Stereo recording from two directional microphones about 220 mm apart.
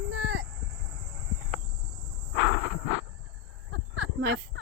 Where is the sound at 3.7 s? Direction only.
55° right (ahead or behind).